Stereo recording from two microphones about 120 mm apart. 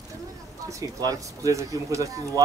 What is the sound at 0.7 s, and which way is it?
Speech, 30° right (ahead or behind).